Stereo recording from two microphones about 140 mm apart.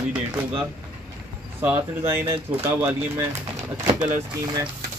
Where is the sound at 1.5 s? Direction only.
15° right (ahead or behind).